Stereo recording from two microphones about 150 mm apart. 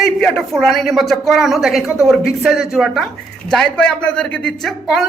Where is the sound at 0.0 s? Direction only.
5° left (ahead or behind).